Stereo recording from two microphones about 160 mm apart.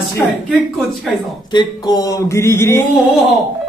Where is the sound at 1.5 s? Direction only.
25° left (ahead or behind).